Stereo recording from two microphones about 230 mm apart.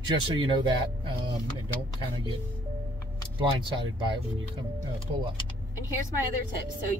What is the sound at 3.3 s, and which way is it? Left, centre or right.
Speech, right.